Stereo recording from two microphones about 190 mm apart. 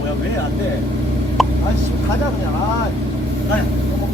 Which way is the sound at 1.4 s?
Centre (ahead or behind).